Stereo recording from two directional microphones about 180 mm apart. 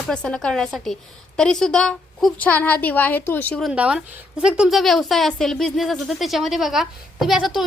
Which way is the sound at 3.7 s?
5° right (ahead or behind).